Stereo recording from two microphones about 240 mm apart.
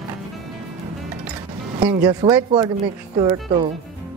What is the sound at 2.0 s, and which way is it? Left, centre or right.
Speech, centre.